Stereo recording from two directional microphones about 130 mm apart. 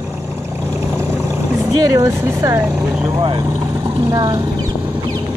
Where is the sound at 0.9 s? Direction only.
20° right (ahead or behind).